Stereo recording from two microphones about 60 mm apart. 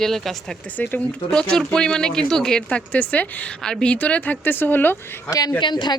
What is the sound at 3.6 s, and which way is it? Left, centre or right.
Speech, centre.